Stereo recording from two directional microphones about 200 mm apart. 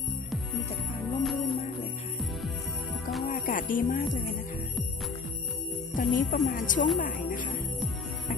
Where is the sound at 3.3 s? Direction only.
40° left (ahead or behind).